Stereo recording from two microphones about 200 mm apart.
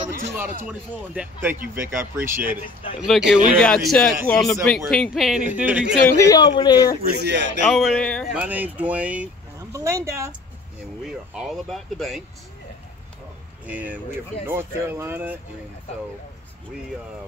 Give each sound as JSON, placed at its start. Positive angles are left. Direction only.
{"t": 0.7, "sound": "speech", "side_deg": -10}
{"t": 6.1, "sound": "speech", "side_deg": 15}
{"t": 7.1, "sound": "speech", "side_deg": -60}
{"t": 7.6, "sound": "speech", "side_deg": 0}
{"t": 8.4, "sound": "speech", "side_deg": -10}
{"t": 11.1, "sound": "speech", "side_deg": 0}
{"t": 13.7, "sound": "speech", "side_deg": -10}